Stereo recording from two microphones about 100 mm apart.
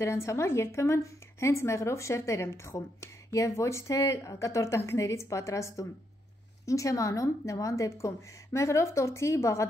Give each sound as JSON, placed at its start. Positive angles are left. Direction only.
{"t": 0.0, "sound": "a woman's voice", "side_deg": 30}